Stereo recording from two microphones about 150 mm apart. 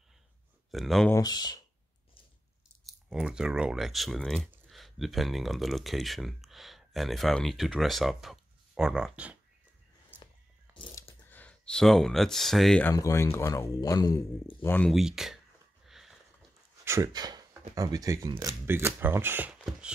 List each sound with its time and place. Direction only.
0.7 s speech: centre (ahead or behind)
1.1 s speech: 25° left (ahead or behind)
2.8 s speech: centre (ahead or behind)
10.1 s a sound: 15° right (ahead or behind)
11.2 s speech: 10° left (ahead or behind)
12.9 s speech: 20° left (ahead or behind)
14.9 s speech: 5° right (ahead or behind)
15.9 s sniff: centre (ahead or behind)
16.8 s speech: 20° right (ahead or behind)